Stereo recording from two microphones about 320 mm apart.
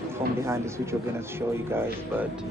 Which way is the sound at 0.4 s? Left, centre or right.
Centre.